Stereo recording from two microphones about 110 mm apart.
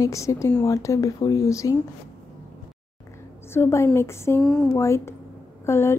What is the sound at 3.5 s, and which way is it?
Speech, 25° left (ahead or behind).